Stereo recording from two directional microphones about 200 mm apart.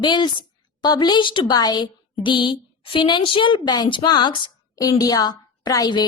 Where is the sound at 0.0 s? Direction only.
20° left (ahead or behind).